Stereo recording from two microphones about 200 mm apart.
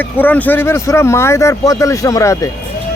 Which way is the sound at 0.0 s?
10° left (ahead or behind).